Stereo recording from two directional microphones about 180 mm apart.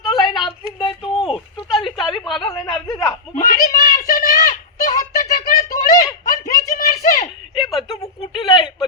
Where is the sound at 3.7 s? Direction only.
50° left (ahead or behind).